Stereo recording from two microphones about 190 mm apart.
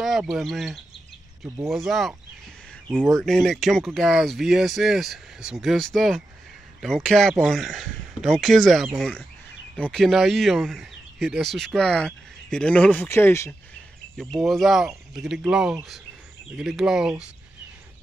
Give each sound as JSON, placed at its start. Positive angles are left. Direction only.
{"t": 0.0, "sound": "speech", "side_deg": 0}
{"t": 3.2, "sound": "speech", "side_deg": 0}
{"t": 14.1, "sound": "speech", "side_deg": 0}